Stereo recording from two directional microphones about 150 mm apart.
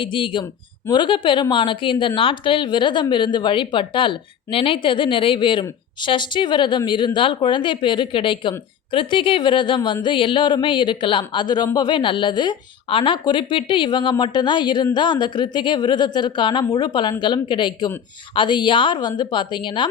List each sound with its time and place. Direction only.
0.0 s a woman's voice: 35° left (ahead or behind)